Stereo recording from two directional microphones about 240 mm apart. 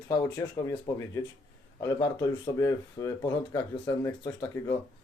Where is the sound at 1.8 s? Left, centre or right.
Centre.